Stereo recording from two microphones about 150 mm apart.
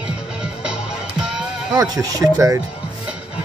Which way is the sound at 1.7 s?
25° right (ahead or behind).